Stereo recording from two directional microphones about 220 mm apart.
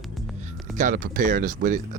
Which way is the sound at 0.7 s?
35° right (ahead or behind).